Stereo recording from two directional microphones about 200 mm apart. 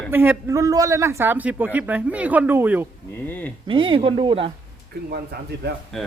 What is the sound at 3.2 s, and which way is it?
Speech, 10° left (ahead or behind).